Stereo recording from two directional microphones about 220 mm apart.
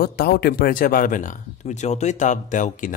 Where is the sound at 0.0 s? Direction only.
45° left (ahead or behind).